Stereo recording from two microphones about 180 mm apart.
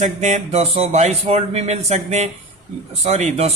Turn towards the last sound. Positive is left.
turn(degrees=-35)  # may be behind; listen again after turning